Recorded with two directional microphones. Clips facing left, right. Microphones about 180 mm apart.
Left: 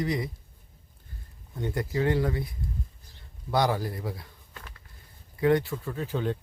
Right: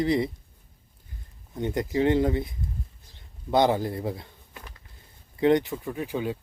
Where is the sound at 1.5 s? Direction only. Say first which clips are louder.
Right 3 dB; 20° right (ahead or behind).